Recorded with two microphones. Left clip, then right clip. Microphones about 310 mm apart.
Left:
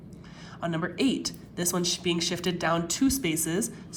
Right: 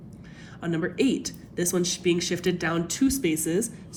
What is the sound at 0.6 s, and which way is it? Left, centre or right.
Speech, centre.